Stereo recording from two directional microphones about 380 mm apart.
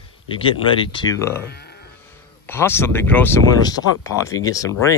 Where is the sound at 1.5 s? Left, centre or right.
Left.